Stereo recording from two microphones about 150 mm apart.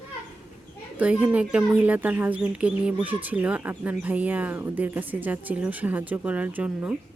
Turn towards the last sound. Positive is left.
turn(degrees=-10)  # may be behind; listen again after turning